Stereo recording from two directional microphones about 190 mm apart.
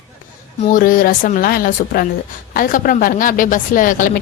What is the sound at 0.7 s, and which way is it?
A woman's voice, 45° left (ahead or behind).